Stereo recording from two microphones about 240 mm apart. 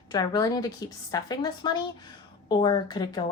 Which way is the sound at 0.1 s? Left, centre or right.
Centre.